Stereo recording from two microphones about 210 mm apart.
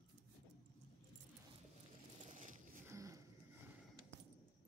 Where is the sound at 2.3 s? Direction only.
35° right (ahead or behind).